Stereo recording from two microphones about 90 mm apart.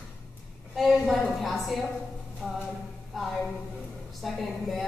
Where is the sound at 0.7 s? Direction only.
Centre (ahead or behind).